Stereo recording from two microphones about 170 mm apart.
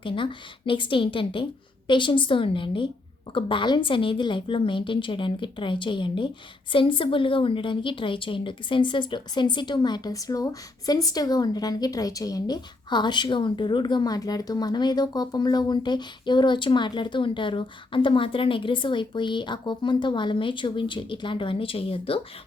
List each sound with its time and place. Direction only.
0.0 s a woman's voice: 30° left (ahead or behind)